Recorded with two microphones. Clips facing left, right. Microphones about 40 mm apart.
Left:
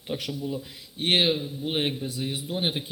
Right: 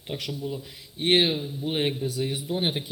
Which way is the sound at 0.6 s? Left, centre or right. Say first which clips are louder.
Left 1 dB; centre.